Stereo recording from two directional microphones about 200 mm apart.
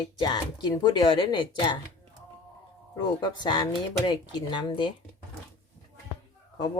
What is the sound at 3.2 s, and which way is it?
Speech, 20° left (ahead or behind).